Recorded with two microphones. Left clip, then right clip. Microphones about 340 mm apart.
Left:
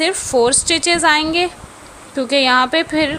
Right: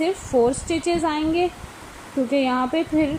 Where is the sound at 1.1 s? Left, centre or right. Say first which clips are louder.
Left 7 dB; left.